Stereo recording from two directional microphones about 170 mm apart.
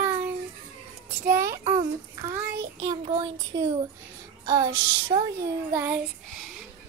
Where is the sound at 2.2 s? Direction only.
20° right (ahead or behind).